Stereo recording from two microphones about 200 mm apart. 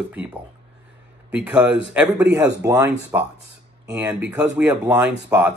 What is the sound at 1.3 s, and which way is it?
Speech, 5° right (ahead or behind).